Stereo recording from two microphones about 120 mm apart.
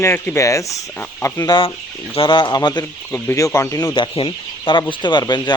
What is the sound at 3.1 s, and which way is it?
Speech, 25° left (ahead or behind).